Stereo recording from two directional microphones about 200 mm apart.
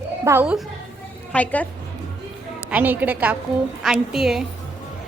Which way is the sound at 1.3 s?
5° left (ahead or behind).